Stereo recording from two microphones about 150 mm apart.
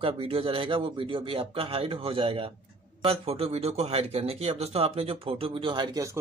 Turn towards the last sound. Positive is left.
turn(degrees=-35)  # may be behind; listen again after turning